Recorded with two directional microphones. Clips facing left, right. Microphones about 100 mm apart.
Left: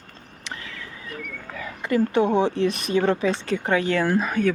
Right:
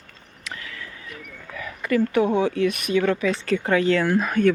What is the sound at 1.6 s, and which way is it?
Speech, 25° left (ahead or behind).